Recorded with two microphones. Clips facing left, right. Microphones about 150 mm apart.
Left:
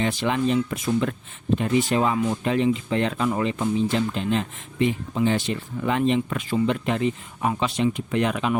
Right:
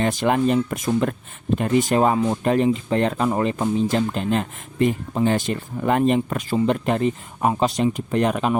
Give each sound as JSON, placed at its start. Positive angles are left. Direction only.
{"t": 0.0, "sound": "speech", "side_deg": -45}
{"t": 2.1, "sound": "speech", "side_deg": -30}
{"t": 2.4, "sound": "speech", "side_deg": -45}